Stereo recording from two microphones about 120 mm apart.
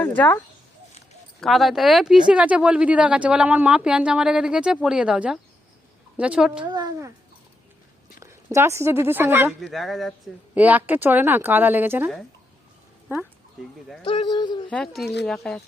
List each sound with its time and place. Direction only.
0.0 s speech: 15° left (ahead or behind)
1.4 s speech: centre (ahead or behind)
6.7 s speech: 35° right (ahead or behind)
8.2 s speech: 25° right (ahead or behind)
9.6 s speech: centre (ahead or behind)
10.5 s speech: 15° right (ahead or behind)
14.0 s speech: 45° left (ahead or behind)
14.7 s speech: 10° left (ahead or behind)